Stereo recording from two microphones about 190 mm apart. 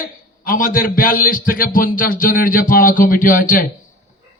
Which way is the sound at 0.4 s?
45° left (ahead or behind).